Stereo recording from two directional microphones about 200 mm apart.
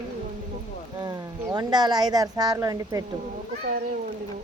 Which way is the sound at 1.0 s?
20° right (ahead or behind).